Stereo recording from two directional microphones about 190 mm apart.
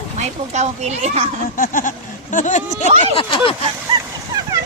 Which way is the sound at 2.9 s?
35° right (ahead or behind).